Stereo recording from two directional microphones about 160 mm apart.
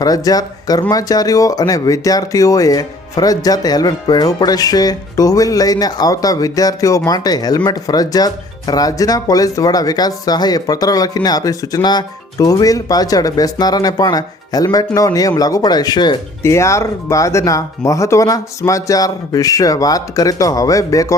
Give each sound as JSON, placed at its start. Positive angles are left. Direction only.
{"t": 0.0, "sound": "speech", "side_deg": 25}